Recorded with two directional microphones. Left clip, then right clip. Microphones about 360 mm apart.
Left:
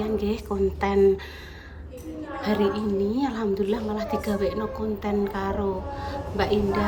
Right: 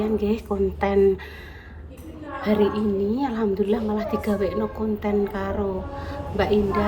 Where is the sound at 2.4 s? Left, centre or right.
Centre.